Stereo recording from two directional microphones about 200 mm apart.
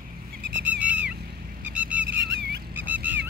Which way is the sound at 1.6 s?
5° right (ahead or behind).